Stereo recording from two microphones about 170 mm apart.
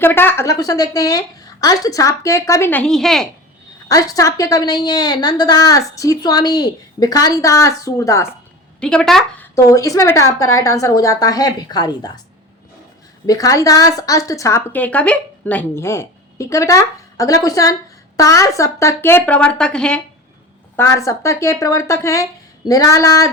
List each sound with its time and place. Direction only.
0.0 s a woman's voice: 10° left (ahead or behind)
3.8 s a woman's voice: 20° left (ahead or behind)
8.8 s a woman's voice: 5° left (ahead or behind)
9.6 s a woman's voice: 20° left (ahead or behind)
13.2 s a woman's voice: 20° left (ahead or behind); by 20.0 s 5° left (ahead or behind)
20.7 s a woman's voice: 15° left (ahead or behind)